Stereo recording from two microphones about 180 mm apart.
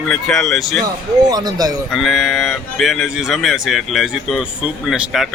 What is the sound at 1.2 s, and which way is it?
Speech, 20° right (ahead or behind).